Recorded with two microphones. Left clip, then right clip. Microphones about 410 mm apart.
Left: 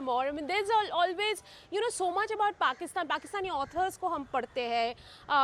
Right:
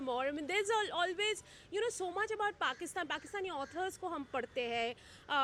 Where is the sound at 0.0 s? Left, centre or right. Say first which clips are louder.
Left 6 dB; left.